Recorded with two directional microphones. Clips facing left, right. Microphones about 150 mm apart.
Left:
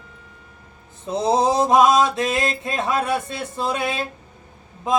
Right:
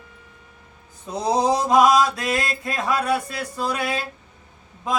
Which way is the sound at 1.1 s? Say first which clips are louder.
Left 2 dB; 25° left (ahead or behind).